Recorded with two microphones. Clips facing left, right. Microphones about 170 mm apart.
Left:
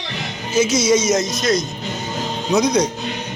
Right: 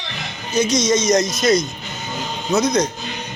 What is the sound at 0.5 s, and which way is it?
Speech, 5° left (ahead or behind).